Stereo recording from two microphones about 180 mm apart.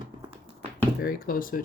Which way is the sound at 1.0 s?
55° left (ahead or behind).